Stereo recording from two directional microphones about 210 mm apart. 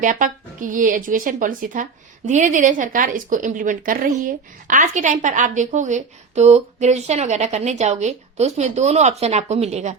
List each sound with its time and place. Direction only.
0.0 s speech: 40° right (ahead or behind)